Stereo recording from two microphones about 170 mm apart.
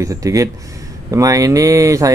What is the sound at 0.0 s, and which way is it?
Speech, 20° right (ahead or behind).